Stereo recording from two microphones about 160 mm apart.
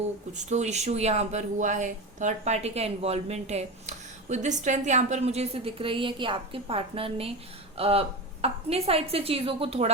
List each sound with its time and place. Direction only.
0.3 s a woman's voice: 45° right (ahead or behind)